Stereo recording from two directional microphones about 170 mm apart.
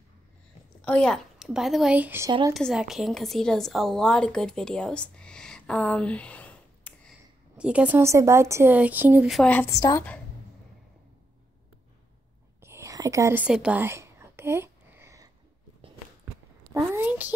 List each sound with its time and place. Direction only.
0.8 s a woman's voice: 5° left (ahead or behind); by 2.3 s 15° right (ahead or behind)
2.5 s a woman's voice: centre (ahead or behind)
7.5 s speech: 5° right (ahead or behind)
9.3 s a woman's voice: 10° left (ahead or behind)
12.5 s whispering: 15° right (ahead or behind)
16.7 s a sound: 10° right (ahead or behind)